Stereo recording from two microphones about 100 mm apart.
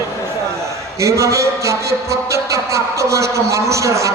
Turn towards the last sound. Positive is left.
turn(degrees=-30)  # may be behind; listen again after turning